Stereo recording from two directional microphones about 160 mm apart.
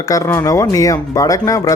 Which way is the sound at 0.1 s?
20° left (ahead or behind).